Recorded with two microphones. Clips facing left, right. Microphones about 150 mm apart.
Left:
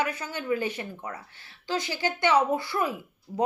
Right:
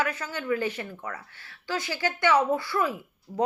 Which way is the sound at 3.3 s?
Centre (ahead or behind).